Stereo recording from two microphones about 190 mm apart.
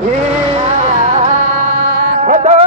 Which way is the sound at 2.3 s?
35° right (ahead or behind).